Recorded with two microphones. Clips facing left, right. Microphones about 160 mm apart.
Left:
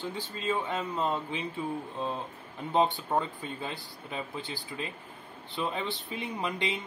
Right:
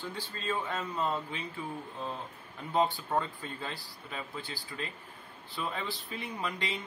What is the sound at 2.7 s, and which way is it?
Speech, 20° left (ahead or behind).